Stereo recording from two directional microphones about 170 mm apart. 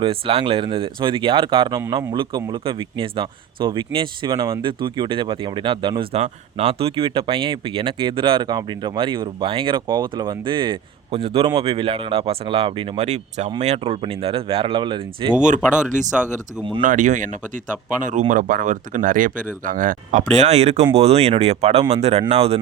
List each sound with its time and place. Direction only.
0.0 s speech: 35° right (ahead or behind)
15.4 s speech: 50° right (ahead or behind)
16.1 s speech: 5° right (ahead or behind)
16.8 s speech: 50° right (ahead or behind)